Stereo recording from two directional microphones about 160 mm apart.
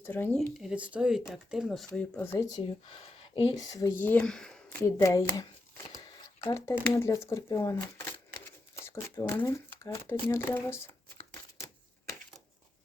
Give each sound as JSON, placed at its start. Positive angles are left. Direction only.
{"t": 0.0, "sound": "speech", "side_deg": 15}
{"t": 0.6, "sound": "speech", "side_deg": -5}
{"t": 2.6, "sound": "speech", "side_deg": 35}
{"t": 3.6, "sound": "speech", "side_deg": 20}
{"t": 4.8, "sound": "speech", "side_deg": 20}